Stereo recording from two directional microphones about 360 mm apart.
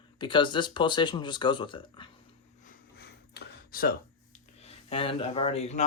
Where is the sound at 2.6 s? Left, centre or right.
Left.